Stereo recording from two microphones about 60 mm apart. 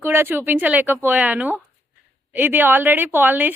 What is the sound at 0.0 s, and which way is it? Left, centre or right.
A woman's voice, right.